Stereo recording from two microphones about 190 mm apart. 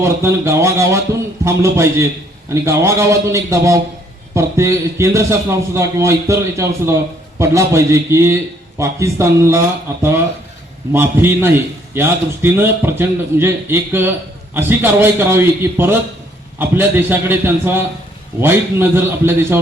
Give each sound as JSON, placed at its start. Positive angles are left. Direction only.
{"t": 0.0, "sound": "a man's voice", "side_deg": -15}